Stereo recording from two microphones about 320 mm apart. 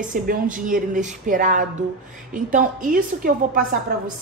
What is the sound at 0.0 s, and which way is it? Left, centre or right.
A woman's voice, right.